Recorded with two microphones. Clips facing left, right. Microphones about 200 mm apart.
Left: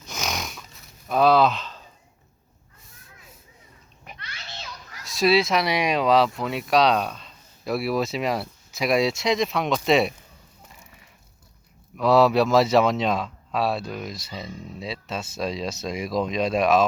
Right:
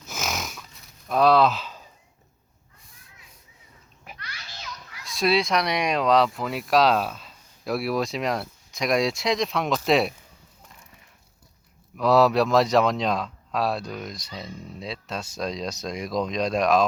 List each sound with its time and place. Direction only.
0.1 s snoring: centre (ahead or behind)
1.0 s speech: centre (ahead or behind)
4.2 s children playing: 25° left (ahead or behind)
5.0 s speech: centre (ahead or behind)
11.9 s speech: centre (ahead or behind)